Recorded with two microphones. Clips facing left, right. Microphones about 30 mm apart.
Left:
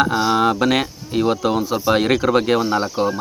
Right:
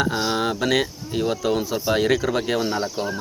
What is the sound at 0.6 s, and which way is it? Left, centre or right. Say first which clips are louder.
Speech: left 3 dB; left.